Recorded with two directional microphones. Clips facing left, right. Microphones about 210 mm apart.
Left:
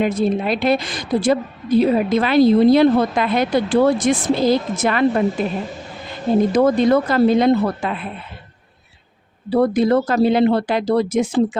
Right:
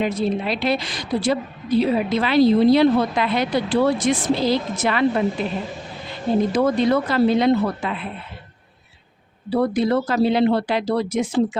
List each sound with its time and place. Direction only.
0.0 s a woman's voice: 50° left (ahead or behind)
6.5 s a woman's voice: 45° left (ahead or behind)
9.5 s a woman's voice: 50° left (ahead or behind)